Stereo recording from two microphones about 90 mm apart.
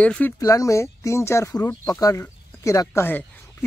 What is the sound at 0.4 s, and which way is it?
Speech, 35° left (ahead or behind).